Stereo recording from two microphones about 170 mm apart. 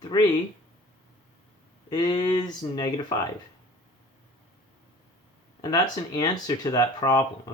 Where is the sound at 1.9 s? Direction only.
25° left (ahead or behind).